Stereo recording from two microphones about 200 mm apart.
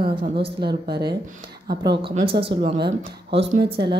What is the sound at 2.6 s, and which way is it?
Speech, 55° right (ahead or behind).